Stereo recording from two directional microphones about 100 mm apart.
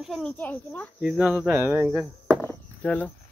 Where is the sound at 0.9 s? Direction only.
10° right (ahead or behind).